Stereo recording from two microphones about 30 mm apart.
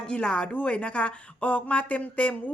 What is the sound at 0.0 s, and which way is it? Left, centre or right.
Speech, left.